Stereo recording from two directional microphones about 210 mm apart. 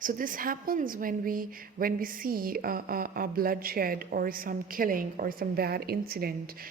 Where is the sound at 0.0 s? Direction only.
40° right (ahead or behind).